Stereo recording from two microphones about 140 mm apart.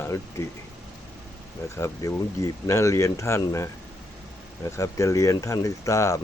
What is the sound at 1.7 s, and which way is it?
Speech, 20° left (ahead or behind).